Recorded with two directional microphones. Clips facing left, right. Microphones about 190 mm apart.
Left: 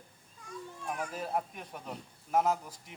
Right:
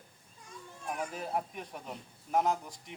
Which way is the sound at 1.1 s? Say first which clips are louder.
Left 1 dB; centre (ahead or behind).